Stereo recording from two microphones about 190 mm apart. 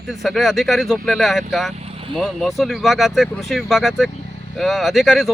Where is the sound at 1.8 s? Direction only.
30° right (ahead or behind).